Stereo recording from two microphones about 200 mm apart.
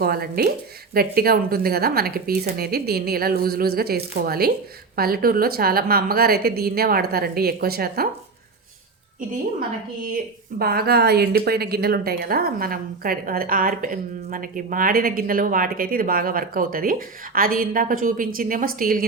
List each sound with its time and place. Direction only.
0.0 s a woman's voice: 50° right (ahead or behind)
10.6 s a woman's voice: 50° right (ahead or behind)